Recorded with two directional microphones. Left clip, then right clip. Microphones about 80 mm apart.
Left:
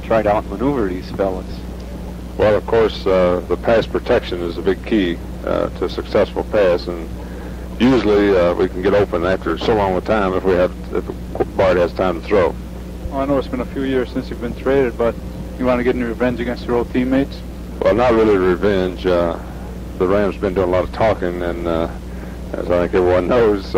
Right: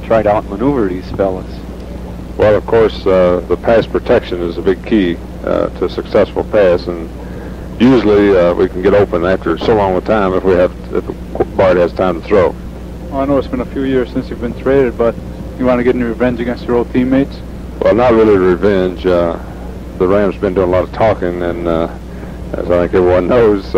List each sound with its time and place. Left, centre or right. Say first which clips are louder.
0.1 s speech: right 4 dB; right